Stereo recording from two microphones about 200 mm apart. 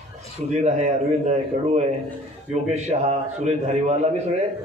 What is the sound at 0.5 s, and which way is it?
A man's voice, 35° right (ahead or behind).